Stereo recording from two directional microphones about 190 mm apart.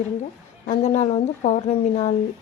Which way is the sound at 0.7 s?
40° left (ahead or behind).